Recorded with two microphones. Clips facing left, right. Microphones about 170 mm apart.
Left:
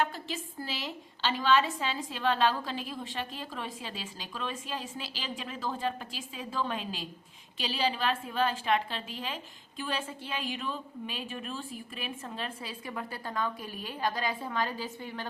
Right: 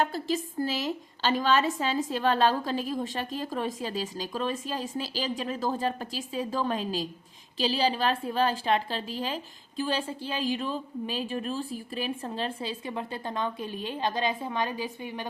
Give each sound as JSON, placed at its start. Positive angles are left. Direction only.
{"t": 0.0, "sound": "a woman's voice", "side_deg": -40}